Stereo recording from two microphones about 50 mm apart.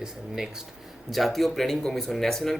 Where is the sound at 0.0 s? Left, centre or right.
Centre.